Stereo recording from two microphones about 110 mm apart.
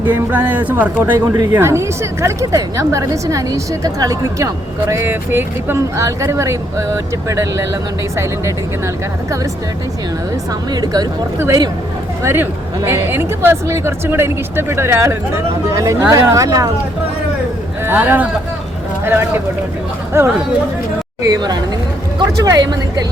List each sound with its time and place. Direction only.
0.0 s a woman's voice: 15° right (ahead or behind)
10.7 s speech: 35° right (ahead or behind)
11.3 s a woman's voice: 25° right (ahead or behind)
17.8 s a woman's voice: 15° right (ahead or behind)
21.2 s speech: 35° right (ahead or behind)